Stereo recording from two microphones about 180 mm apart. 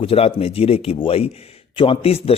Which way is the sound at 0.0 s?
30° left (ahead or behind).